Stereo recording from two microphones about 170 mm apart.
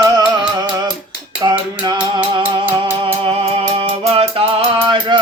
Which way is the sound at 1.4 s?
25° right (ahead or behind).